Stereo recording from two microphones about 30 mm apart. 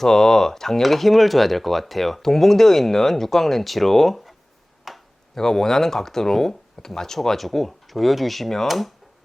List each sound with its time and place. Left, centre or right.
0.0 s speech: centre
0.8 s speech: centre
4.9 s tick-tock: centre
5.3 s speech: centre
7.3 s speech: centre